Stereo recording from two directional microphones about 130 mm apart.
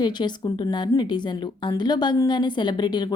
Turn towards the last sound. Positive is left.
turn(degrees=35)  # may be behind; listen again after turning